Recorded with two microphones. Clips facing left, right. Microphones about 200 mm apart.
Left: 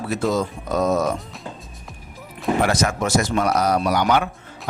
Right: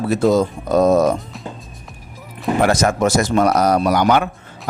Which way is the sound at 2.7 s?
45° right (ahead or behind).